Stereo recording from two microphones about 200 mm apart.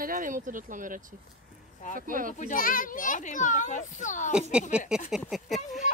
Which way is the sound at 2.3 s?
40° left (ahead or behind).